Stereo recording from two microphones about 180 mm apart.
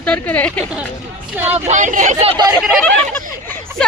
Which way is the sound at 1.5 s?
40° right (ahead or behind).